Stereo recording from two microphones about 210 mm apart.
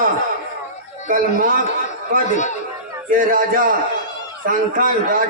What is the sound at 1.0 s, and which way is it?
A man's voice, 40° right (ahead or behind).